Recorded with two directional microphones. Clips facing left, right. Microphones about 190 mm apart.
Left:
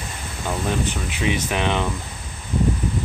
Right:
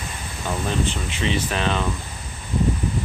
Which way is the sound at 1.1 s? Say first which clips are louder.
Left 1 dB; 10° left (ahead or behind).